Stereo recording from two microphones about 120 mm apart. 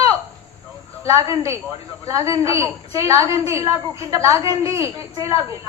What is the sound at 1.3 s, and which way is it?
A woman's voice, 25° right (ahead or behind).